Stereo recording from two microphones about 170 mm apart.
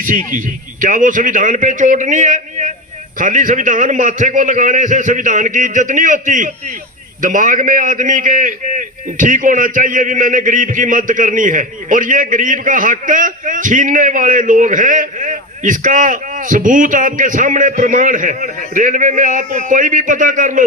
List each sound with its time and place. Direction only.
0.0 s a man's voice: 50° right (ahead or behind)